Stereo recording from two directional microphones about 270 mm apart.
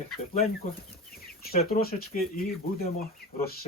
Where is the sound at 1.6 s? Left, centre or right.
Left.